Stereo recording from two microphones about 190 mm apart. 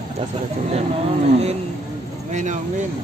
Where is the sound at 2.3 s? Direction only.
40° right (ahead or behind).